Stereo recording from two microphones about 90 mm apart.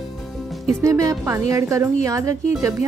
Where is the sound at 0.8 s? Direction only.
35° right (ahead or behind).